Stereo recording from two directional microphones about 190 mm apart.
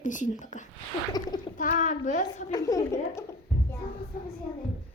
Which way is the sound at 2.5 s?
20° left (ahead or behind).